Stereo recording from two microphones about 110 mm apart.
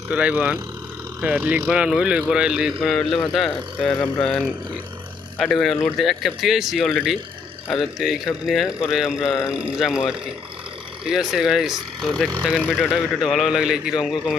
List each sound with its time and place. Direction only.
0.2 s speech: 10° right (ahead or behind)
11.0 s speech: 5° right (ahead or behind)
12.5 s speech: 15° left (ahead or behind)
13.2 s speech: centre (ahead or behind)